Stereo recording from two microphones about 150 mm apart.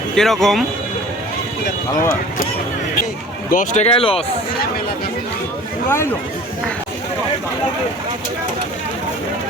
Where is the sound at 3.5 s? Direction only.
65° left (ahead or behind).